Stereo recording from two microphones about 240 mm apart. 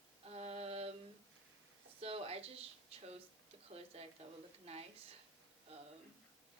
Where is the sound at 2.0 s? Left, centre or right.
Right.